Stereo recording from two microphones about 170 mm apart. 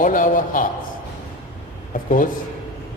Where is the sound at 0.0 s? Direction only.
55° left (ahead or behind).